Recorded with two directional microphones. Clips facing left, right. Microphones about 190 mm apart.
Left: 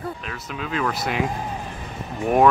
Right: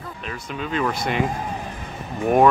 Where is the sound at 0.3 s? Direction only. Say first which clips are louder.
Right 2 dB; centre (ahead or behind).